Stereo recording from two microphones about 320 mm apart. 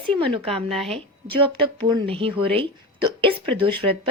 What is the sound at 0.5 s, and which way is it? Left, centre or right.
Speech, centre.